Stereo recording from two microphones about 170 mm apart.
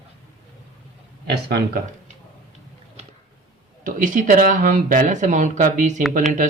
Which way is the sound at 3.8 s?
50° right (ahead or behind).